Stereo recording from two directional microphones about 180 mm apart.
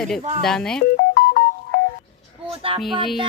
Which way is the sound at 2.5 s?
30° right (ahead or behind).